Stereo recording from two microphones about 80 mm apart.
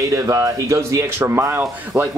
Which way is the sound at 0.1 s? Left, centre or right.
Right.